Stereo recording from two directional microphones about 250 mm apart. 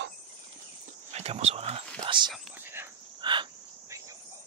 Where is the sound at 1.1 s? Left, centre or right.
Right.